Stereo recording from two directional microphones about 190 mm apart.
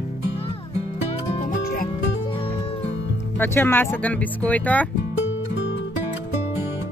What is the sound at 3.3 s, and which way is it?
Speech, 10° left (ahead or behind).